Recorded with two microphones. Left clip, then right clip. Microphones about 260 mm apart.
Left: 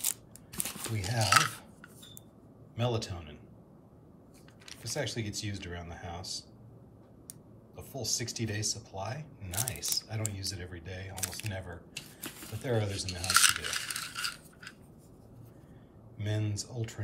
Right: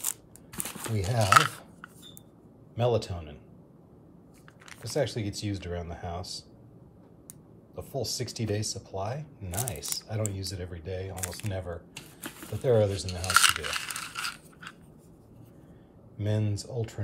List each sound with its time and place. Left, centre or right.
0.0 s scissors: centre
2.7 s a man's voice: centre
4.8 s speech: centre
7.7 s speech: centre
16.2 s speech: centre